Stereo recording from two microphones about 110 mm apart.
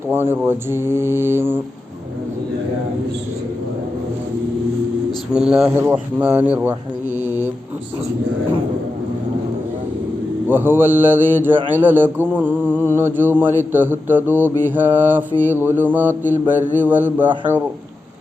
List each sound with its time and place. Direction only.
0.1 s speech: 20° right (ahead or behind)
5.3 s mantra: 5° right (ahead or behind)
5.7 s mantra: 20° right (ahead or behind)
10.5 s mantra: 20° right (ahead or behind)